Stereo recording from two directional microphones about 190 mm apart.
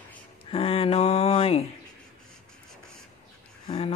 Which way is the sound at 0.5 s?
30° left (ahead or behind).